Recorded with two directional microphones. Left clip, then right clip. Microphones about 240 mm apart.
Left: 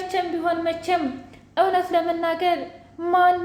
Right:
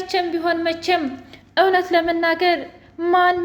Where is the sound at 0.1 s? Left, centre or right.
Right.